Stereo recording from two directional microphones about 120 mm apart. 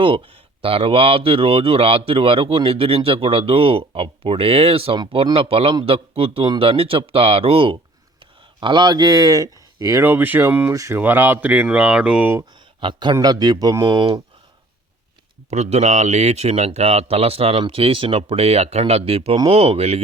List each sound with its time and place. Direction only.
0.6 s speech: 50° right (ahead or behind)
8.6 s speech: 40° right (ahead or behind); by 12.3 s 10° right (ahead or behind)
12.8 s speech: 40° right (ahead or behind)
15.4 s speech: 65° right (ahead or behind)